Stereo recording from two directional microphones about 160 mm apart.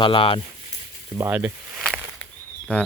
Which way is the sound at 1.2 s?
10° right (ahead or behind).